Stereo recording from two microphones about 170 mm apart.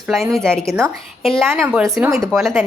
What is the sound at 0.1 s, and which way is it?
Speech, centre (ahead or behind).